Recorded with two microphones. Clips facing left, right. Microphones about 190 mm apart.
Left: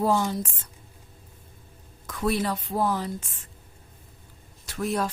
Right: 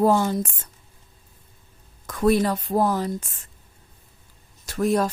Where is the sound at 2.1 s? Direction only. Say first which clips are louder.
Right 6 dB; 45° right (ahead or behind).